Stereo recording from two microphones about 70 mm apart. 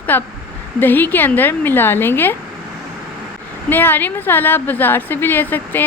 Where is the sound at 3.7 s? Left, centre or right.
Left.